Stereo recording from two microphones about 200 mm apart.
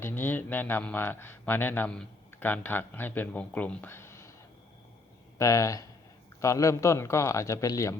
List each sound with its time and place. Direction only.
0.0 s speech: 10° left (ahead or behind)
5.4 s speech: 15° left (ahead or behind)